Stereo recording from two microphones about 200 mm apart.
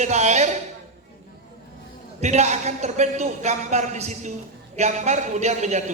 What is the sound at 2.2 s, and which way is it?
A man's voice, 35° right (ahead or behind).